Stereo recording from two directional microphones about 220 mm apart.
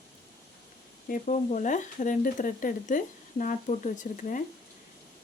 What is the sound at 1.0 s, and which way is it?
Speech, 35° left (ahead or behind).